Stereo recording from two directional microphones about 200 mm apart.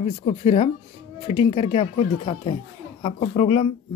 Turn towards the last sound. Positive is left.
turn(degrees=30)  # may be behind; listen again after turning